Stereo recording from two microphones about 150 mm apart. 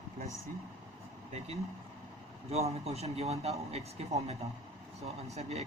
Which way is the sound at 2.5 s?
45° right (ahead or behind).